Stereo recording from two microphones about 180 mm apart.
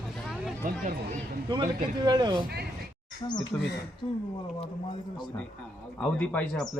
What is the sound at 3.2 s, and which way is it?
Speech, 25° left (ahead or behind).